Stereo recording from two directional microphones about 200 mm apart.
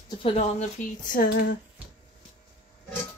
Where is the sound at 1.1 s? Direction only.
45° left (ahead or behind).